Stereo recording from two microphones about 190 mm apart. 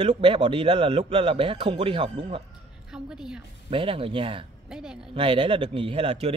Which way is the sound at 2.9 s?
5° right (ahead or behind).